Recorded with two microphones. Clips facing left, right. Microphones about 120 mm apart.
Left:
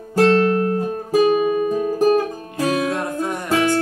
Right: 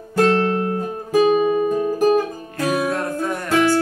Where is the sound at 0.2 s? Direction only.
20° right (ahead or behind).